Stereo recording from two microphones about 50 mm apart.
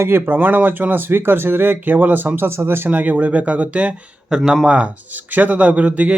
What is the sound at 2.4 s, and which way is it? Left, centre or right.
Speech, right.